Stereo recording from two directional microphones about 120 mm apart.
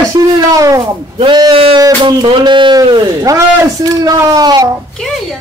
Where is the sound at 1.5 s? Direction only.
50° right (ahead or behind).